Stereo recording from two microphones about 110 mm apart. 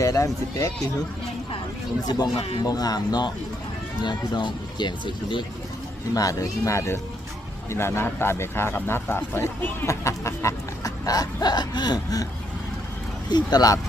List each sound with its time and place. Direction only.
0.0 s speech: 30° left (ahead or behind)
2.0 s speech: 35° left (ahead or behind)
2.3 s speech: 65° left (ahead or behind)
2.6 s speech: 35° left (ahead or behind)
6.1 s speech: 30° left (ahead or behind)
13.3 s speech: 35° left (ahead or behind)